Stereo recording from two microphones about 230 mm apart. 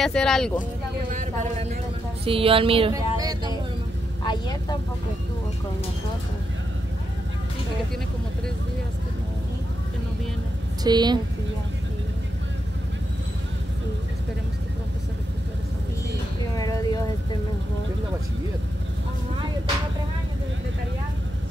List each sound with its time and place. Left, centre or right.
0.0 s speech: centre
1.1 s a woman's voice: right
4.2 s speech: centre
10.8 s a woman's voice: centre
16.5 s speech: centre